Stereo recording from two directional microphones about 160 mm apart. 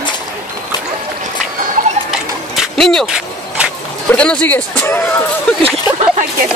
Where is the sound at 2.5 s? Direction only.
5° left (ahead or behind).